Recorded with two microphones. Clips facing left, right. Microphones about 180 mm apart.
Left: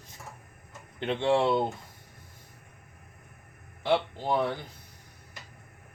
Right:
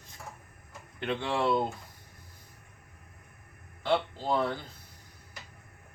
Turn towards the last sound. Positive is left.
turn(degrees=15)  # may be behind; listen again after turning